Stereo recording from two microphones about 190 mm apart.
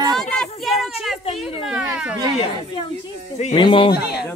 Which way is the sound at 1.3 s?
Centre (ahead or behind).